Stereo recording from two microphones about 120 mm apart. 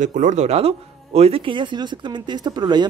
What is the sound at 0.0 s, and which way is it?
Speech, 90° right.